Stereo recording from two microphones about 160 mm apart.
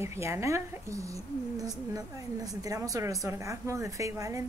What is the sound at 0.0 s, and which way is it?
Speech, 15° right (ahead or behind).